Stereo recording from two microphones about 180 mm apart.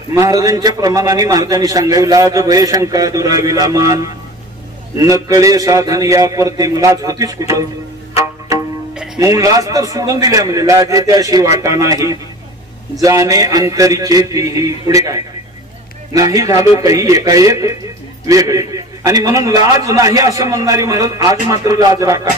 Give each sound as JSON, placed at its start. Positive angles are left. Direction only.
{"t": 0.1, "sound": "a man's voice", "side_deg": -20}
{"t": 8.9, "sound": "music", "side_deg": -5}
{"t": 9.2, "sound": "a man's voice", "side_deg": -20}
{"t": 16.3, "sound": "a man's voice", "side_deg": -20}